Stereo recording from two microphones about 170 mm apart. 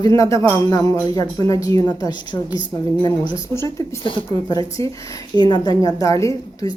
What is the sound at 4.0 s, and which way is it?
A woman's voice, 30° left (ahead or behind).